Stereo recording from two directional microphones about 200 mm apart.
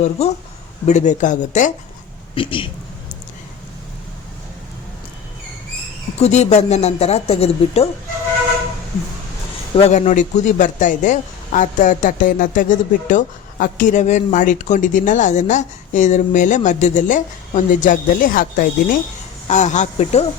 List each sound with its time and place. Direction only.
0.0 s a man's voice: 35° left (ahead or behind)
2.3 s a man's voice: 25° left (ahead or behind)
6.1 s a man's voice: 35° left (ahead or behind)
9.7 s a man's voice: 30° left (ahead or behind)